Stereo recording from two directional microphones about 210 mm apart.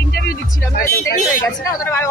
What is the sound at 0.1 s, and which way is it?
Music, 45° left (ahead or behind).